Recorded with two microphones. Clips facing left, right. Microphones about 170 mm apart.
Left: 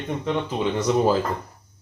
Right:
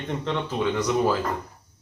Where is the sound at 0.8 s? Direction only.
25° left (ahead or behind).